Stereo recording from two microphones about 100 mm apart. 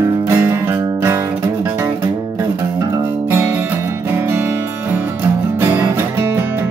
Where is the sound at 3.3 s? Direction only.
25° right (ahead or behind).